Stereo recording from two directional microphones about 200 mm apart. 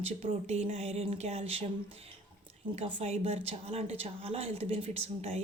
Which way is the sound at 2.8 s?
30° right (ahead or behind).